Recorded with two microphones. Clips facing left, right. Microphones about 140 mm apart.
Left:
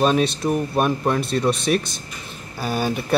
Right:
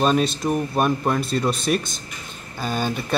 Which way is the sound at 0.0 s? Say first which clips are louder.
Left 1 dB; centre (ahead or behind).